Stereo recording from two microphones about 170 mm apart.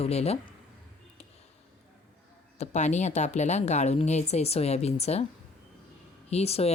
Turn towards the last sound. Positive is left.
turn(degrees=35)  # may be behind; listen again after turning